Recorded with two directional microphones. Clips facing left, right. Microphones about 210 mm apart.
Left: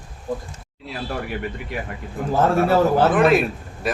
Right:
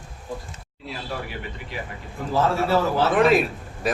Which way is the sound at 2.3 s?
50° left (ahead or behind).